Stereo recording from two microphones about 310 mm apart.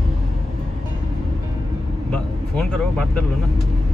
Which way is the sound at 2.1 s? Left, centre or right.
Centre.